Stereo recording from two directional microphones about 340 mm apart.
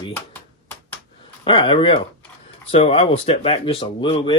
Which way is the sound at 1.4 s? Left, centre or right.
Centre.